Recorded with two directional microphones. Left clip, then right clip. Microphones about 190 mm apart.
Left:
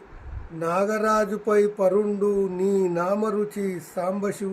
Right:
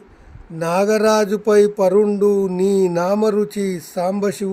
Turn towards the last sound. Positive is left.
turn(degrees=-55)  # may be behind; listen again after turning